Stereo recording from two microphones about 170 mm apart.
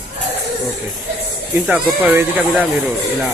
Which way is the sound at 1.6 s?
10° right (ahead or behind).